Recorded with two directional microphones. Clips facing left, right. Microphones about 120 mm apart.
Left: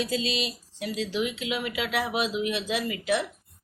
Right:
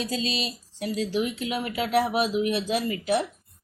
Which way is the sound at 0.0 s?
35° right (ahead or behind).